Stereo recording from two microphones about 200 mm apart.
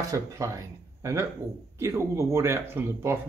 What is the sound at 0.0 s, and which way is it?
A man's voice, 15° right (ahead or behind).